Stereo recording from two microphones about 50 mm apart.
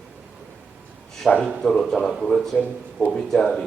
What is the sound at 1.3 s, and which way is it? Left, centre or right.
Speech, centre.